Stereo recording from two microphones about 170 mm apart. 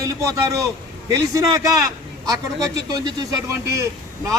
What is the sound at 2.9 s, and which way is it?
Speech, 20° right (ahead or behind).